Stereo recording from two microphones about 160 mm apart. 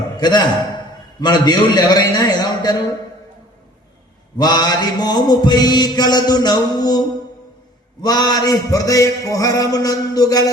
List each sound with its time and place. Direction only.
0.2 s a man's voice: 25° left (ahead or behind)
1.2 s mantra: 25° left (ahead or behind)
4.4 s mantra: 25° left (ahead or behind)
8.0 s mantra: 25° left (ahead or behind)